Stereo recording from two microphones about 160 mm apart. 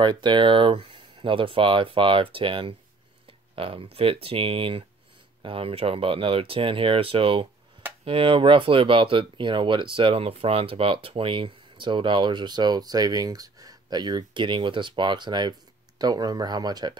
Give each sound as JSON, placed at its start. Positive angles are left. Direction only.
{"t": 0.0, "sound": "speech", "side_deg": -30}